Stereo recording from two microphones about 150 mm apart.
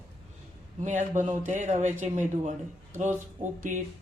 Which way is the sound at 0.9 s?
55° right (ahead or behind).